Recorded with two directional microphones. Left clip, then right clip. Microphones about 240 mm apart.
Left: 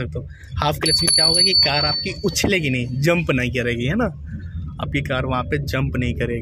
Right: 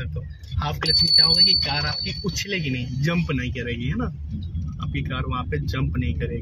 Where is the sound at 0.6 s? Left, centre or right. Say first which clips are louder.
Left 2 dB; left.